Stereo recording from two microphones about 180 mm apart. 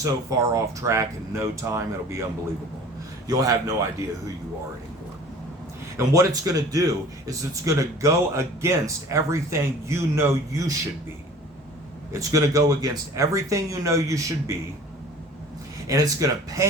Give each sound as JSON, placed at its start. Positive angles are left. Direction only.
{"t": 0.0, "sound": "a man's voice", "side_deg": -20}
{"t": 3.2, "sound": "speech", "side_deg": -20}
{"t": 6.0, "sound": "a man's voice", "side_deg": -15}
{"t": 12.1, "sound": "a man's voice", "side_deg": -15}
{"t": 15.9, "sound": "speech", "side_deg": -20}